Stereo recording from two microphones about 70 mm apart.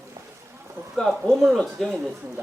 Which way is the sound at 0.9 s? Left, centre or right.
Centre.